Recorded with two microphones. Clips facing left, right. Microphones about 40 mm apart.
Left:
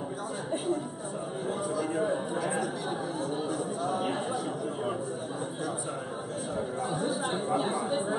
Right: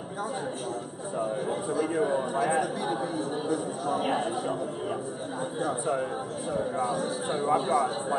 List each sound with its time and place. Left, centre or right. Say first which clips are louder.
1.5 s a sound: left 1 dB; right
1.9 s a man's voice: right 3 dB; centre
6.9 s speech: right 1 dB; centre
7.5 s speech: right 5 dB; centre